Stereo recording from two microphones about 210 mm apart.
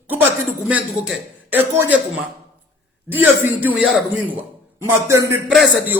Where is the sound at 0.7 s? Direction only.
5° right (ahead or behind).